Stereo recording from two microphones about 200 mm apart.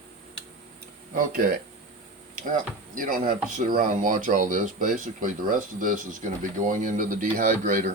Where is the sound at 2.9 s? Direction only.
45° right (ahead or behind).